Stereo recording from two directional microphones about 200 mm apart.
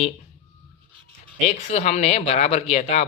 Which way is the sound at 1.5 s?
35° left (ahead or behind).